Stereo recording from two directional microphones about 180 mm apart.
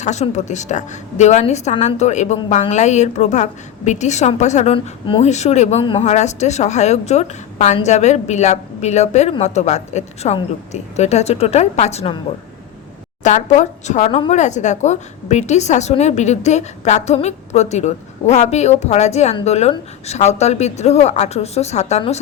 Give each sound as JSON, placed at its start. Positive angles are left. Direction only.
{"t": 0.0, "sound": "a woman's voice", "side_deg": 40}
{"t": 13.2, "sound": "a woman's voice", "side_deg": 40}